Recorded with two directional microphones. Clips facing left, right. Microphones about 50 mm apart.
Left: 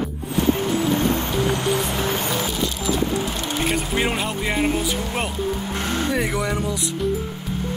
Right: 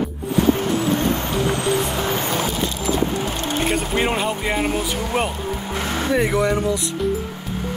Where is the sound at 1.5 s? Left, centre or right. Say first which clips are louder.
Right 1 dB; right.